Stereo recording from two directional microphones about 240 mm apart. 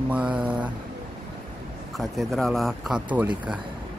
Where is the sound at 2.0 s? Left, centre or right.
Centre.